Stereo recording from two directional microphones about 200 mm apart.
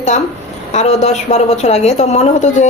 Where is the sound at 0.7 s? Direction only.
35° left (ahead or behind).